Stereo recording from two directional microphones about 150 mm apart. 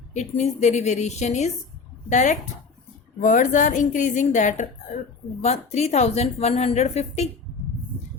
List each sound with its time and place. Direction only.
0.1 s a woman's voice: 50° left (ahead or behind)